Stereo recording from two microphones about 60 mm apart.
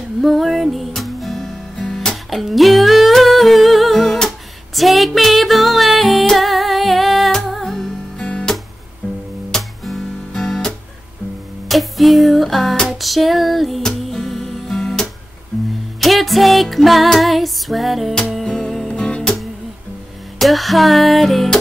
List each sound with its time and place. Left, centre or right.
0.2 s music: centre
9.5 s music: centre
11.7 s music: centre
19.0 s music: centre
20.3 s music: centre